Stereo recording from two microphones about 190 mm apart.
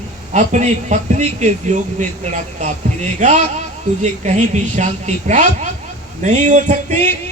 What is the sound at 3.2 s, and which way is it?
A woman's voice, 40° right (ahead or behind).